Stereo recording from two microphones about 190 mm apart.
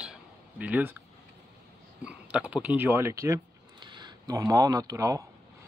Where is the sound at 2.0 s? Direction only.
5° right (ahead or behind).